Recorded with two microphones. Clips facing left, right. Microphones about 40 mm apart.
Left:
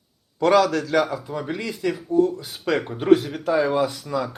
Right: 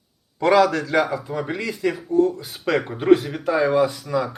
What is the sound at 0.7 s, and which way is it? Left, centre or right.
A man's voice, centre.